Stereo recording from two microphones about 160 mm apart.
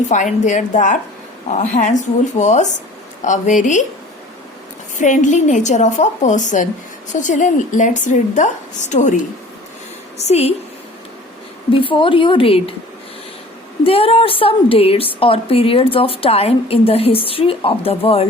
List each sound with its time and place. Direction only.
0.1 s a woman's voice: 50° left (ahead or behind)
4.9 s a woman's voice: 50° left (ahead or behind)
10.2 s a woman's voice: 40° left (ahead or behind)
11.7 s a woman's voice: 30° left (ahead or behind)
13.8 s a woman's voice: 35° left (ahead or behind)